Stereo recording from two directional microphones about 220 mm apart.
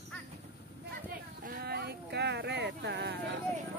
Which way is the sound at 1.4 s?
45° right (ahead or behind).